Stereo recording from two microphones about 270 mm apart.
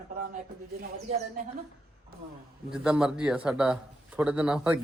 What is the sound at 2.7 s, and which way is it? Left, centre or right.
A man's voice, centre.